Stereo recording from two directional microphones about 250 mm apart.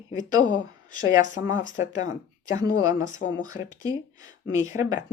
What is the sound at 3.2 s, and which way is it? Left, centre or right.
Speech, left.